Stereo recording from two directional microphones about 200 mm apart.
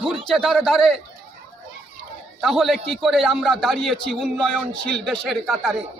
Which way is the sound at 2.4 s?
Centre (ahead or behind).